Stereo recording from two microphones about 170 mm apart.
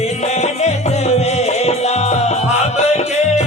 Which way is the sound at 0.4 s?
40° left (ahead or behind).